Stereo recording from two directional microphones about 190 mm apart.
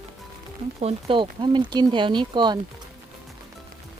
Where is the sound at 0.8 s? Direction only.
25° right (ahead or behind).